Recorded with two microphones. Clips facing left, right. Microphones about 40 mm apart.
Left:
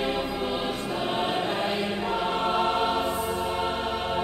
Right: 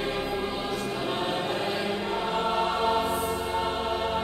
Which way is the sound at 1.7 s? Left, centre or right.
Left.